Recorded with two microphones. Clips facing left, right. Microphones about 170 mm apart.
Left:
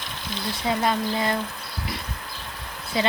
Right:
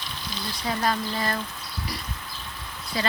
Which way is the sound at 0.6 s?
20° left (ahead or behind).